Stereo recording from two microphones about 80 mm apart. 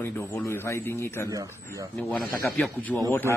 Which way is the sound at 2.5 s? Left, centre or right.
Centre.